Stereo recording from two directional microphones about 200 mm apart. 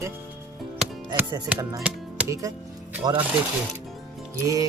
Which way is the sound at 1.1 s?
15° right (ahead or behind).